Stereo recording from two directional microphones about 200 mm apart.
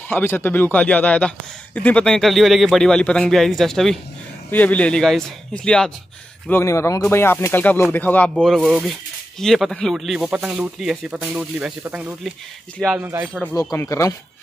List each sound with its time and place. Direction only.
0.1 s speech: 10° left (ahead or behind); by 13.3 s 10° right (ahead or behind)
13.3 s speech: 5° left (ahead or behind)
13.6 s speech: 15° left (ahead or behind)